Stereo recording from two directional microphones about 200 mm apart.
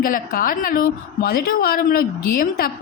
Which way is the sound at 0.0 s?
45° left (ahead or behind).